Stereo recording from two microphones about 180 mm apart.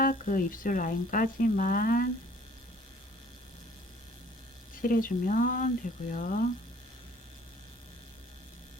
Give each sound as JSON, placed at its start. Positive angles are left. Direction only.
{"t": 0.0, "sound": "speech", "side_deg": 50}
{"t": 4.7, "sound": "speech", "side_deg": 50}